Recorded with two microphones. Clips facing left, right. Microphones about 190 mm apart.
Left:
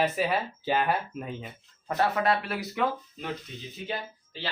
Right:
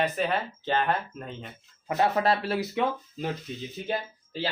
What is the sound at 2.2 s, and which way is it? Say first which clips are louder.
Speech: right 2 dB; 30° right (ahead or behind).